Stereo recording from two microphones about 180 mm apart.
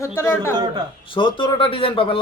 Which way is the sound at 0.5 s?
20° right (ahead or behind).